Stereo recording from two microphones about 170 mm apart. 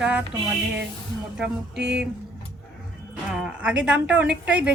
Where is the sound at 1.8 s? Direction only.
90° right.